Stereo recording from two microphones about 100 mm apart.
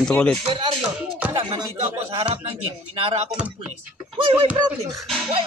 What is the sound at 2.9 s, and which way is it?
Speech, 70° right (ahead or behind).